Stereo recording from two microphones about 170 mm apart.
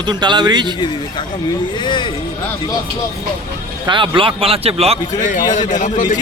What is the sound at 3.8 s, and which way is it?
Speech, 30° right (ahead or behind).